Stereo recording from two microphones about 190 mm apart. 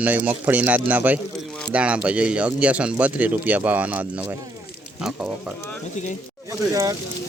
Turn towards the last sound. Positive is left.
turn(degrees=-20)  # may be behind; listen again after turning